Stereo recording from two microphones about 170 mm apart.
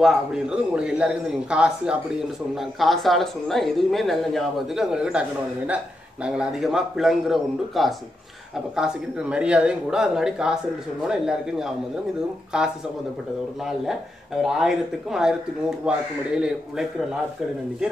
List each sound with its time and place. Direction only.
0.0 s speech: 5° right (ahead or behind)
6.2 s speech: 5° right (ahead or behind)